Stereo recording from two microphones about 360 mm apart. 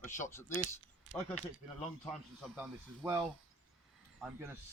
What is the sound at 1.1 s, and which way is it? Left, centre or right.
Squish, right.